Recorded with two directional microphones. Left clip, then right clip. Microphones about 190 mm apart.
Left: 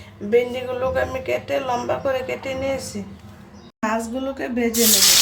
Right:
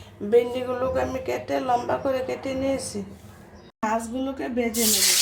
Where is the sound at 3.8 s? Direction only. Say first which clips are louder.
Left 2 dB; 10° left (ahead or behind).